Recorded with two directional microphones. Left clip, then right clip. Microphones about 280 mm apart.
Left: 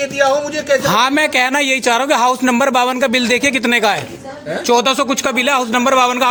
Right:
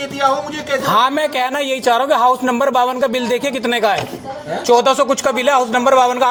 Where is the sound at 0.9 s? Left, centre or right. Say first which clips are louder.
Left 1 dB; left.